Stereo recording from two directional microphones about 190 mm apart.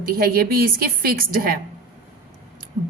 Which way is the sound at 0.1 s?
50° right (ahead or behind).